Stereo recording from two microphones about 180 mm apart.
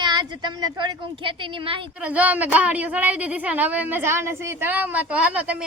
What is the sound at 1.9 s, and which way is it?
Speech, 10° right (ahead or behind).